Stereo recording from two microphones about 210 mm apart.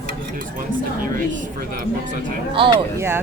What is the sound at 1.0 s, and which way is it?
Speech, 40° right (ahead or behind).